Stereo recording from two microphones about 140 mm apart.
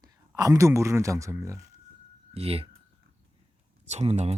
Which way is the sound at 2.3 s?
45° right (ahead or behind).